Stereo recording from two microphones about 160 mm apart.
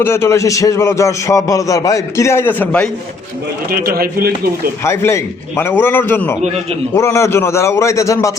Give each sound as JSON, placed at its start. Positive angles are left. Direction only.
{"t": 0.0, "sound": "speech", "side_deg": 15}
{"t": 3.7, "sound": "speech", "side_deg": -70}
{"t": 4.8, "sound": "speech", "side_deg": 15}